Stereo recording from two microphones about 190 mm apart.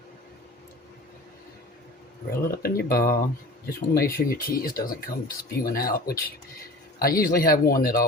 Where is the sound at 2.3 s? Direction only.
50° left (ahead or behind).